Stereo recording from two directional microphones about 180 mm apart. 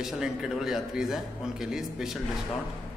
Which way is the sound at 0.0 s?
5° right (ahead or behind).